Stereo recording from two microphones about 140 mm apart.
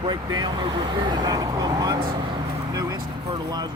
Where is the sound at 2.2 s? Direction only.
35° right (ahead or behind).